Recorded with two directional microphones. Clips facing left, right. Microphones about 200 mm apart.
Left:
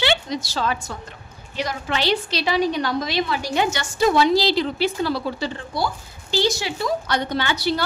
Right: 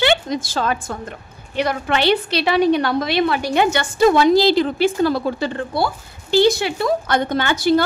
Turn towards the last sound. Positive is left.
turn(degrees=-50)  # may be behind; listen again after turning